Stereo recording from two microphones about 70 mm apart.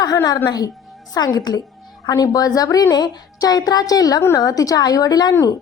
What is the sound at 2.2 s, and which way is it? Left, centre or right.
A woman's voice, left.